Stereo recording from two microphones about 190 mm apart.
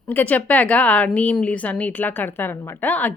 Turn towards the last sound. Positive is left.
turn(degrees=10)  # may be behind; listen again after turning